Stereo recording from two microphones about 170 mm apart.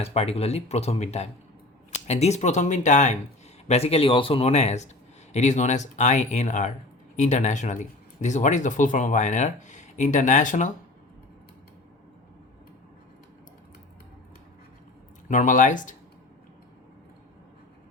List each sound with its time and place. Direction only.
0.0 s speech: 35° left (ahead or behind)
15.3 s speech: 50° left (ahead or behind)